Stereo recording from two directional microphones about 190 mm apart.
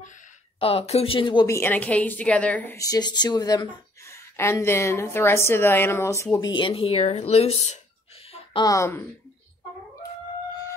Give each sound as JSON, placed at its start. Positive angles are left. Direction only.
{"t": 0.6, "sound": "a woman's voice", "side_deg": 30}
{"t": 8.3, "sound": "speech", "side_deg": 20}